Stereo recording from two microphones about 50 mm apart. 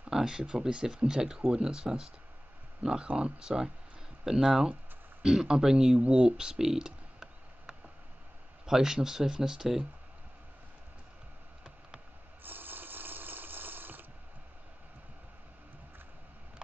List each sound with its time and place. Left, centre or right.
0.1 s speech: centre
5.9 s a sound: centre
8.6 s speech: centre
12.4 s water: right